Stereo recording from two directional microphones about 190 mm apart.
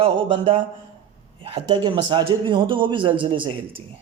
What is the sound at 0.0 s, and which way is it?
A man's voice, 30° right (ahead or behind).